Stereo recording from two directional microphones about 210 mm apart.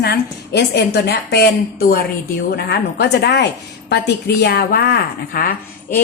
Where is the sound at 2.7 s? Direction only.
50° left (ahead or behind).